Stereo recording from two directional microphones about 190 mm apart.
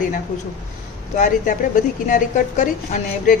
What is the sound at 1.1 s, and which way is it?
A woman's voice, 40° left (ahead or behind).